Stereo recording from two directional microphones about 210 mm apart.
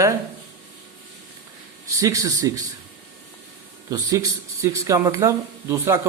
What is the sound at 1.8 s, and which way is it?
Speech, 15° right (ahead or behind).